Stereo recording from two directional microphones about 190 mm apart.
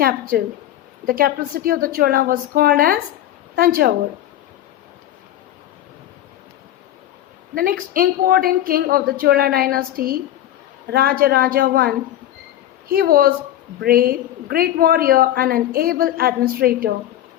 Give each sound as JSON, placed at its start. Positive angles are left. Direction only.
{"t": 0.0, "sound": "a woman's voice", "side_deg": -50}
{"t": 7.5, "sound": "a woman's voice", "side_deg": -50}